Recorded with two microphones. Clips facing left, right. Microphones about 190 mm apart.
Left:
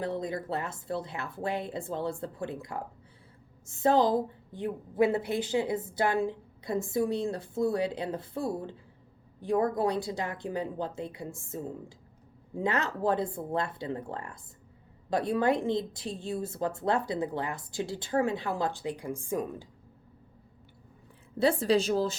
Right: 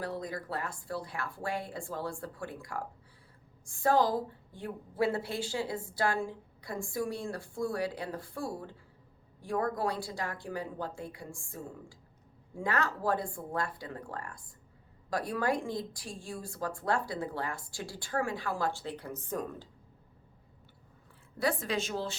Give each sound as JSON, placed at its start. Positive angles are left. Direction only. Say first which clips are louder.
{"t": 0.0, "sound": "a woman's voice", "louder": "left 5 dB", "side_deg": 20}
{"t": 21.3, "sound": "a woman's voice", "louder": "left 7 dB", "side_deg": 30}